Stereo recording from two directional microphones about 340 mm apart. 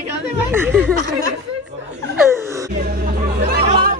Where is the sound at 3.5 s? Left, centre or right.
Right.